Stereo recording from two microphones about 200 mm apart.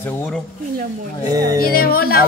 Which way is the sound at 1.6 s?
50° left (ahead or behind).